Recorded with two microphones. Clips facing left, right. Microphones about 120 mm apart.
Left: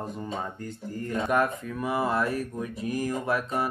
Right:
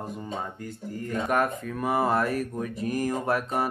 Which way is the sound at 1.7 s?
50° right (ahead or behind).